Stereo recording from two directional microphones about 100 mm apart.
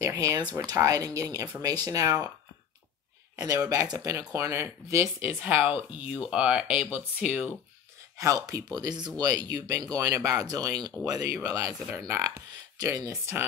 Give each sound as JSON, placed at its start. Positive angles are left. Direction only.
{"t": 0.0, "sound": "a sound", "side_deg": -35}
{"t": 0.7, "sound": "speech", "side_deg": -35}
{"t": 3.4, "sound": "speech", "side_deg": -35}
{"t": 8.2, "sound": "speech", "side_deg": -35}